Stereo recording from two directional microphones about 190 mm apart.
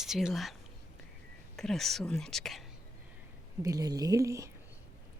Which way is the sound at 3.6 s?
20° right (ahead or behind).